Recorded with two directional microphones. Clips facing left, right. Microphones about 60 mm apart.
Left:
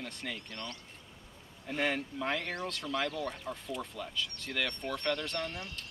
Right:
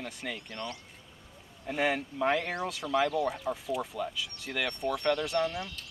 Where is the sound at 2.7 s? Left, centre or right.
Centre.